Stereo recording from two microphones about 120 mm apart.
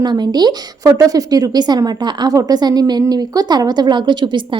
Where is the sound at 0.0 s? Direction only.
35° right (ahead or behind).